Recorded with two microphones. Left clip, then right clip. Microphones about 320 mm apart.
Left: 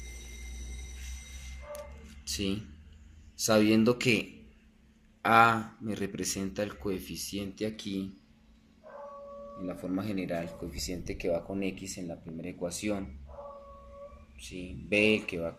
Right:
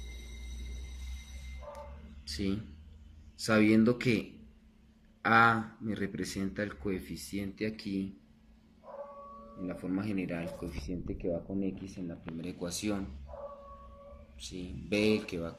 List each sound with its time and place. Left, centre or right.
2.2 s a sound: centre
3.4 s speech: centre
9.6 s speech: centre
10.8 s speech: left
12.4 s speech: centre
14.3 s speech: centre